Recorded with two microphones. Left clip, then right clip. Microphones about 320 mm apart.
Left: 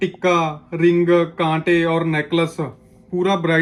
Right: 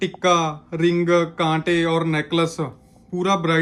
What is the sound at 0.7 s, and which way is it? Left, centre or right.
Speech, centre.